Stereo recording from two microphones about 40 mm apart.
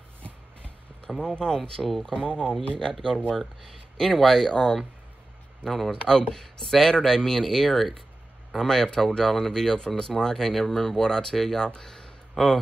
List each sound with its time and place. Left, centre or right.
1.2 s speech: centre
1.6 s speech: centre
2.1 s speech: left
11.8 s a sound: centre